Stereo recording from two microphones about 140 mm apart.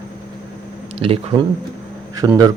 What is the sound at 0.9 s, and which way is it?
Speech, 45° right (ahead or behind).